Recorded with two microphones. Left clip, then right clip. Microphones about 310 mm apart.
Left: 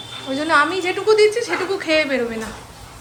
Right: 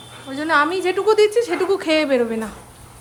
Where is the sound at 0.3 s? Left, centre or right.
Centre.